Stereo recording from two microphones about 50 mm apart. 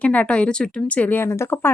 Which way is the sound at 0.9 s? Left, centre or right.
Left.